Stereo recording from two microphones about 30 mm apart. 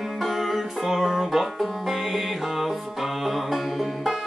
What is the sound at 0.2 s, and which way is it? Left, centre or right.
Music, centre.